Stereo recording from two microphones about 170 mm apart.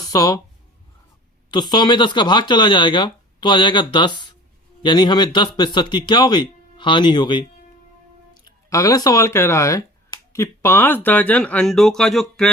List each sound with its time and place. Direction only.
0.1 s speech: 20° left (ahead or behind)
1.5 s speech: 25° left (ahead or behind); by 12.5 s 5° left (ahead or behind)